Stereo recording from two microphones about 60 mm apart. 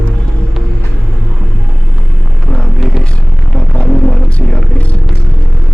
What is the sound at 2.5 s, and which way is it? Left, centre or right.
Music, centre.